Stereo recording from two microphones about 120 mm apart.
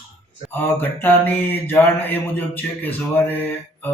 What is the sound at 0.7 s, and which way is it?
Mantra, 15° left (ahead or behind).